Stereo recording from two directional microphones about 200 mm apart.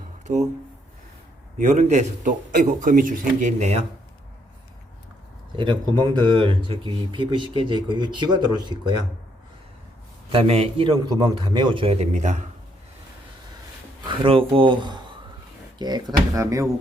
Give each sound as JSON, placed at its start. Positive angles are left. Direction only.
{"t": 0.3, "sound": "speech", "side_deg": -35}
{"t": 1.5, "sound": "speech", "side_deg": -35}
{"t": 5.5, "sound": "speech", "side_deg": -20}
{"t": 10.3, "sound": "speech", "side_deg": -30}
{"t": 14.2, "sound": "speech", "side_deg": -25}